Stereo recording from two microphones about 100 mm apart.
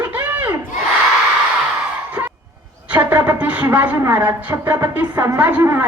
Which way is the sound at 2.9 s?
15° right (ahead or behind).